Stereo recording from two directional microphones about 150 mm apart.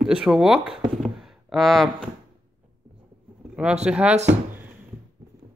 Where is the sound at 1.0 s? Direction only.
Centre (ahead or behind).